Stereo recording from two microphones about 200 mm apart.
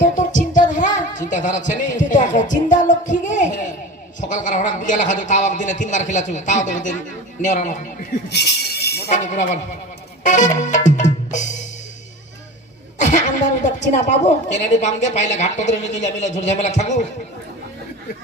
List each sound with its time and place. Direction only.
0.0 s music: 40° left (ahead or behind)
4.2 s a woman's voice: 40° left (ahead or behind)
9.0 s a woman's voice: 35° left (ahead or behind)
10.2 s music: 40° left (ahead or behind)
13.0 s a woman's voice: 35° left (ahead or behind)